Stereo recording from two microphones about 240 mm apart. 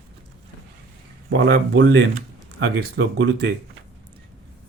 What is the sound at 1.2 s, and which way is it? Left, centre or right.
Speech, right.